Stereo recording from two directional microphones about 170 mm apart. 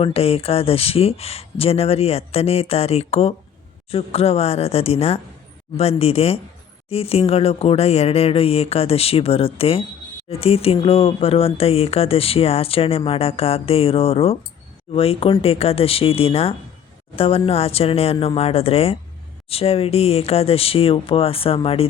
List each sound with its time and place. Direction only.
0.0 s speech: 35° left (ahead or behind)